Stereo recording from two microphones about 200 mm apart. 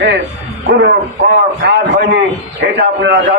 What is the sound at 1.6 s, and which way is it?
A man's voice, 55° right (ahead or behind).